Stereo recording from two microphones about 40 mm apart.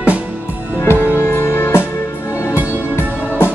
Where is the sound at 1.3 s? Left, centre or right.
Left.